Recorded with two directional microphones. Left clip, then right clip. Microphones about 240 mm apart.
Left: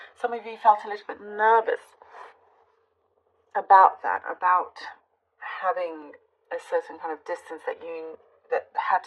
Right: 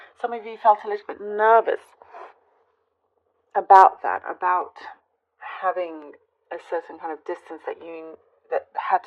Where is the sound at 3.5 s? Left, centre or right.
Right.